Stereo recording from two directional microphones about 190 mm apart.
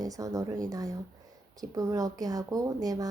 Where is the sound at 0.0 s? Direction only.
20° right (ahead or behind).